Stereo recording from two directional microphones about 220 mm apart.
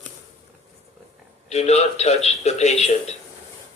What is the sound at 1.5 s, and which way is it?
A man's voice, 30° left (ahead or behind).